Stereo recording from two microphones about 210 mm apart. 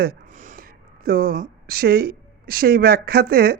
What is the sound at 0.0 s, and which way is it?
Speech, 40° right (ahead or behind).